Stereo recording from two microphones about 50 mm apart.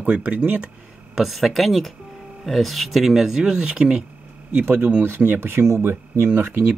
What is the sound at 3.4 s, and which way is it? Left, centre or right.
Speech, centre.